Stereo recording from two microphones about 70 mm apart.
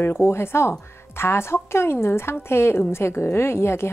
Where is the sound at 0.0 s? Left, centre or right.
Left.